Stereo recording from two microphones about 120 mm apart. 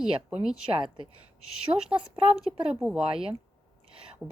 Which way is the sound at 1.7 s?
30° right (ahead or behind).